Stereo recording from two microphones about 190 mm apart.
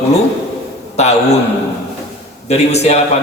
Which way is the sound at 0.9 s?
35° left (ahead or behind).